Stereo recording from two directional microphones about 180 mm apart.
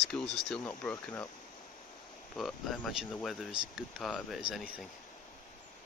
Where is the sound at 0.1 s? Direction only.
5° left (ahead or behind).